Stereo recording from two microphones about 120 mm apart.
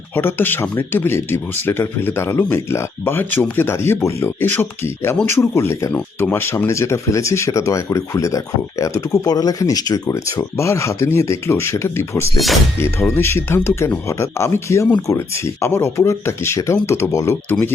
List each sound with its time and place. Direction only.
0.1 s speech: 15° left (ahead or behind)